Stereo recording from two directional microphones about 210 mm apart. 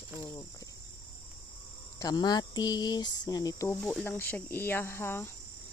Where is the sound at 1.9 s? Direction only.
20° left (ahead or behind).